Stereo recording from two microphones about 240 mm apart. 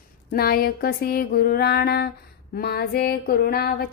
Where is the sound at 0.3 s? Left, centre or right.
Left.